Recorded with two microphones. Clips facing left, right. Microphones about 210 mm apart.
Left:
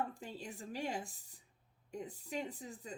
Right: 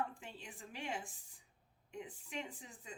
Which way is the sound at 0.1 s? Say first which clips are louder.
Left 6 dB; 40° left (ahead or behind).